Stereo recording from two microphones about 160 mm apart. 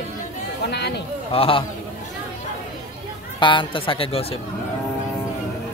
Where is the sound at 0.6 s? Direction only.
90° left.